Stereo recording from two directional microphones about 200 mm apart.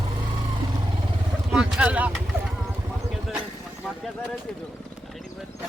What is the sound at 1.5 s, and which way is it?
Speech, 5° right (ahead or behind).